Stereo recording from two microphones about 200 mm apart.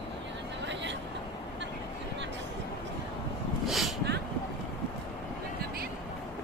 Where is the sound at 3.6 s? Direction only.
Centre (ahead or behind).